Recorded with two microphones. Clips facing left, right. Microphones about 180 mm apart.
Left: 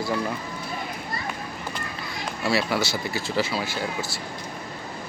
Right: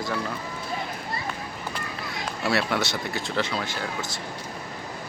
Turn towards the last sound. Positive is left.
turn(degrees=10)  # may be behind; listen again after turning